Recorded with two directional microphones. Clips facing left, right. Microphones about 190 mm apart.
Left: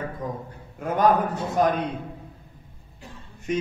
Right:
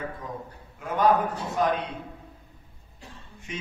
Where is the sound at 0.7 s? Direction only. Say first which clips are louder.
Left 2 dB; 45° left (ahead or behind).